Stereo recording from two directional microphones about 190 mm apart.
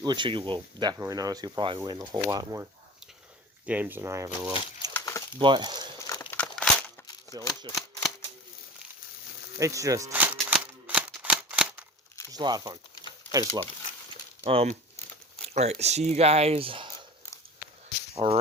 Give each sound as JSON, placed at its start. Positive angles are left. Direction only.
{"t": 0.0, "sound": "speech", "side_deg": -25}
{"t": 3.7, "sound": "speech", "side_deg": -10}
{"t": 4.9, "sound": "crumpling", "side_deg": 15}
{"t": 5.4, "sound": "speech", "side_deg": -25}
{"t": 6.0, "sound": "a sound", "side_deg": 15}
{"t": 6.3, "sound": "crumpling", "side_deg": 5}
{"t": 7.3, "sound": "speech", "side_deg": 15}
{"t": 9.6, "sound": "speech", "side_deg": -15}
{"t": 10.3, "sound": "a sound", "side_deg": -5}
{"t": 12.3, "sound": "speech", "side_deg": -20}
{"t": 14.4, "sound": "speech", "side_deg": -30}
{"t": 18.1, "sound": "speech", "side_deg": -30}